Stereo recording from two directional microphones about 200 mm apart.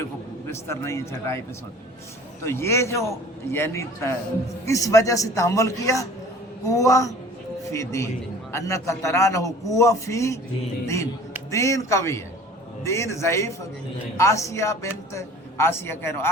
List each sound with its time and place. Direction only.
0.0 s a man's voice: 15° left (ahead or behind)
2.4 s a man's voice: 15° left (ahead or behind)